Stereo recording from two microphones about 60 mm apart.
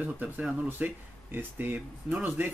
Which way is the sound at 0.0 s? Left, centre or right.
Right.